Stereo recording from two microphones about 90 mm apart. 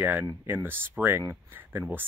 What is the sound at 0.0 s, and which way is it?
Speech, 20° right (ahead or behind).